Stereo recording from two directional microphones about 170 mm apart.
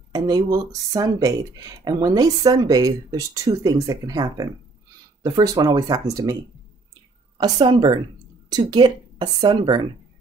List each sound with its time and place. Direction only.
0.1 s speech: 25° right (ahead or behind)
7.3 s speech: 25° right (ahead or behind)